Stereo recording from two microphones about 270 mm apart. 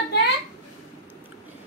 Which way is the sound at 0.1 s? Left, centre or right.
Left.